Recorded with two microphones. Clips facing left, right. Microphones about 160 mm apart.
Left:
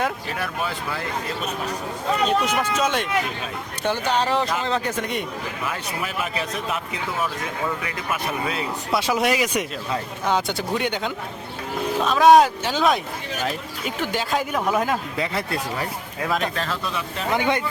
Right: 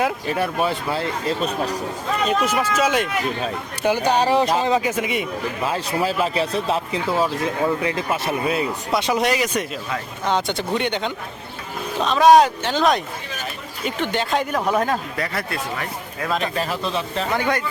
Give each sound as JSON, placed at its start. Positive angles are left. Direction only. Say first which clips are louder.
{"t": 0.3, "sound": "speech", "louder": "right 6 dB", "side_deg": -25}
{"t": 1.4, "sound": "speech", "louder": "right 5 dB", "side_deg": -35}
{"t": 2.2, "sound": "speech", "louder": "right 2 dB", "side_deg": -5}
{"t": 5.6, "sound": "speech", "louder": "right 8 dB", "side_deg": -30}
{"t": 8.9, "sound": "speech", "louder": "even", "side_deg": 5}
{"t": 15.2, "sound": "speech", "louder": "left 1 dB", "side_deg": 25}
{"t": 16.2, "sound": "speech", "louder": "right 1 dB", "side_deg": 0}
{"t": 16.8, "sound": "speech", "louder": "right 4 dB", "side_deg": -25}
{"t": 17.3, "sound": "speech", "louder": "left 1 dB", "side_deg": 20}